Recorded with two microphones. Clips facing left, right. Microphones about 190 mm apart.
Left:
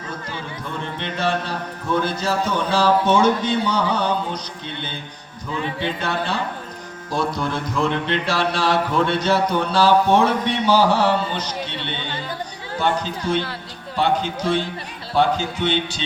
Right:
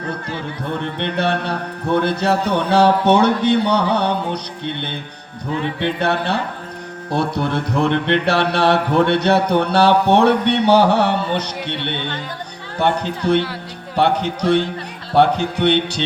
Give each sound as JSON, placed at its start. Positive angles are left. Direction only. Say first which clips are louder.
{"t": 0.7, "sound": "music", "louder": "right 6 dB", "side_deg": -65}